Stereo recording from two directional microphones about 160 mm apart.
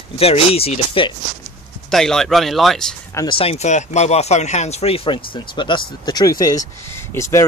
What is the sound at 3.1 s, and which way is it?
Speech, 30° left (ahead or behind).